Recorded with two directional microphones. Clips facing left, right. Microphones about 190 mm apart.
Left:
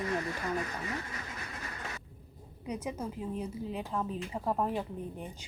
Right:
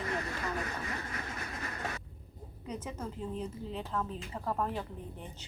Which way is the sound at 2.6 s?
10° left (ahead or behind).